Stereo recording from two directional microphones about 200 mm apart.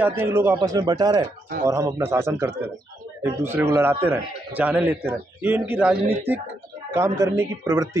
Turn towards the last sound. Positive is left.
turn(degrees=-15)  # may be behind; listen again after turning